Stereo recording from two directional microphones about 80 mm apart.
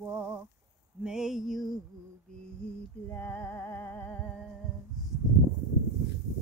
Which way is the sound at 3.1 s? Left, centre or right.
Left.